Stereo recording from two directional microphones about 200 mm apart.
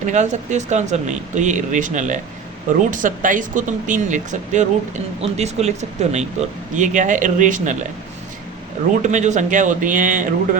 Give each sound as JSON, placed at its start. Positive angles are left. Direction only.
{"t": 0.1, "sound": "speech", "side_deg": -35}
{"t": 9.0, "sound": "speech", "side_deg": -35}